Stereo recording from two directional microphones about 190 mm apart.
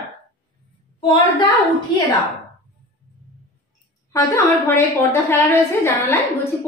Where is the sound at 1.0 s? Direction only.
25° left (ahead or behind).